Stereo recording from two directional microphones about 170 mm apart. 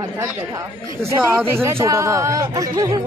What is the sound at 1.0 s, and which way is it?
Speech, 15° right (ahead or behind).